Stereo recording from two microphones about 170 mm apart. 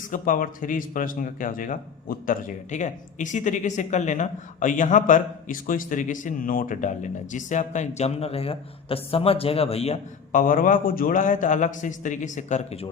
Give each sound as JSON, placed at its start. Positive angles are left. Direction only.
{"t": 0.1, "sound": "speech", "side_deg": 55}
{"t": 10.3, "sound": "speech", "side_deg": 55}